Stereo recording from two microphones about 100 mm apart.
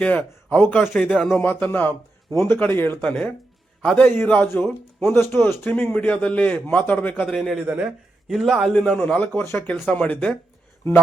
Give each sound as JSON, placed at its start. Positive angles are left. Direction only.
{"t": 0.0, "sound": "a man's voice", "side_deg": 15}
{"t": 1.4, "sound": "a man's voice", "side_deg": 20}
{"t": 8.7, "sound": "a man's voice", "side_deg": 10}
{"t": 9.9, "sound": "a man's voice", "side_deg": 10}